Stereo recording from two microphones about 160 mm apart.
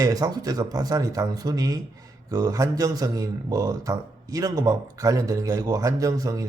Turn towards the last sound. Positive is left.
turn(degrees=-20)  # may be behind; listen again after turning